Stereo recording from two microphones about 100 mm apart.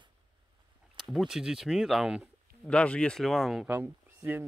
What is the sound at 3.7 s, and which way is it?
Speech, 20° right (ahead or behind).